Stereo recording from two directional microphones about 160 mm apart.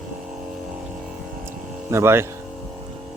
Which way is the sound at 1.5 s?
15° right (ahead or behind).